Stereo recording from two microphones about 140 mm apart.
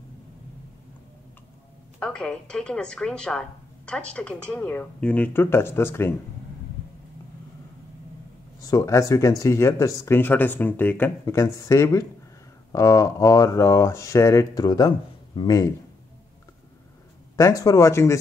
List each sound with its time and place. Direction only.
2.0 s a woman's voice: 5° left (ahead or behind)
8.5 s speech: 25° left (ahead or behind)
17.4 s speech: 25° left (ahead or behind)